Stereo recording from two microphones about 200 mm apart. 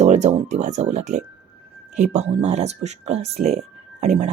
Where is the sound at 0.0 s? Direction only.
35° right (ahead or behind).